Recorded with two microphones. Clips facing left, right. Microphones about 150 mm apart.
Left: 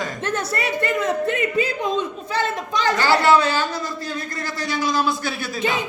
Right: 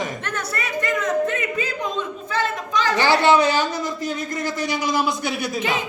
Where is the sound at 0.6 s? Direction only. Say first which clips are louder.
Even; 35° left (ahead or behind).